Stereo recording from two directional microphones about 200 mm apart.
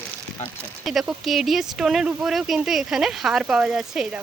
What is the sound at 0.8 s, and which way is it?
Speech, centre (ahead or behind).